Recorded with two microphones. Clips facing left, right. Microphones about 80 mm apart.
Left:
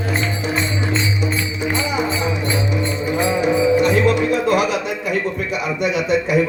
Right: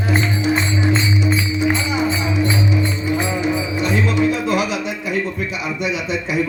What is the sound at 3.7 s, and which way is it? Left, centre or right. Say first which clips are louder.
Music: left 3 dB; left.